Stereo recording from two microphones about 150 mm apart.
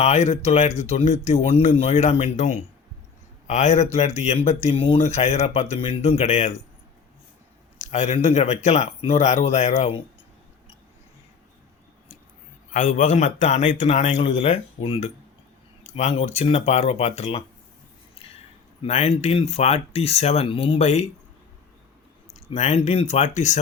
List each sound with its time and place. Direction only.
0.0 s speech: 50° left (ahead or behind)
7.8 s speech: 50° left (ahead or behind)
12.7 s speech: 55° left (ahead or behind)
18.8 s speech: 45° left (ahead or behind)
22.4 s speech: 45° left (ahead or behind)